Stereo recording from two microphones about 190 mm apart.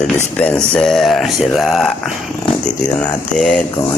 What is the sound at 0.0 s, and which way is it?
Speech, 5° left (ahead or behind).